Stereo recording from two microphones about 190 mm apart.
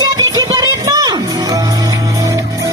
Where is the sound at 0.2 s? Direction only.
20° right (ahead or behind).